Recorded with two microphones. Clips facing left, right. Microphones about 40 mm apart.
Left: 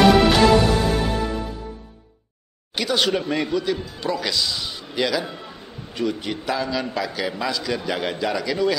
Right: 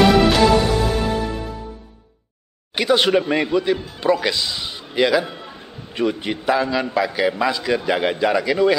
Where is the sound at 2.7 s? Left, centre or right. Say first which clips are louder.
Right 5 dB; right.